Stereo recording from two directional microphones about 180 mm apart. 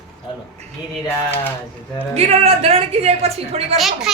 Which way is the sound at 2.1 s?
35° right (ahead or behind).